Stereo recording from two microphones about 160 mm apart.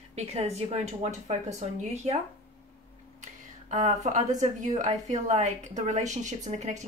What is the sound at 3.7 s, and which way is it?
A woman's voice, 50° right (ahead or behind).